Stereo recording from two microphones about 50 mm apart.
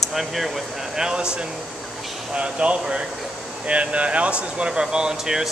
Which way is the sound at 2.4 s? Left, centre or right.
Right.